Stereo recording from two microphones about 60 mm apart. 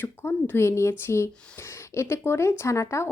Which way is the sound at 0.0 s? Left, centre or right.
Left.